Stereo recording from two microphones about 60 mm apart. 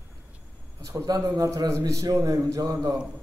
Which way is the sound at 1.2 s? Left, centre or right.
Right.